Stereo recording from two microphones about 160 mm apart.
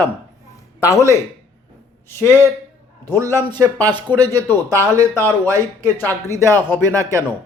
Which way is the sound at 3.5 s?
25° right (ahead or behind).